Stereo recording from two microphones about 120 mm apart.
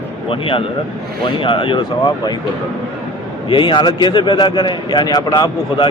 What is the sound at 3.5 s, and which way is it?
A man's voice, 40° left (ahead or behind).